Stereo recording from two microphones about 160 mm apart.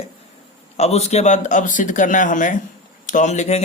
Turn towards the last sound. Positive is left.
turn(degrees=45)  # may be behind; listen again after turning